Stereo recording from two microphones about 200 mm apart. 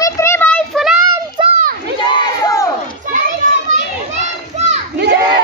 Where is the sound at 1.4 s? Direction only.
25° right (ahead or behind).